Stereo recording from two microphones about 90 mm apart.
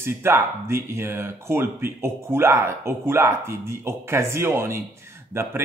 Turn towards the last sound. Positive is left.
turn(degrees=-25)  # may be behind; listen again after turning